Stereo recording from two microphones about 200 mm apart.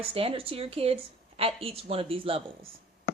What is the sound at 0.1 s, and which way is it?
Speech, 30° right (ahead or behind).